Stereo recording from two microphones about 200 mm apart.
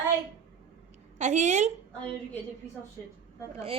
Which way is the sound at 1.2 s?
35° right (ahead or behind).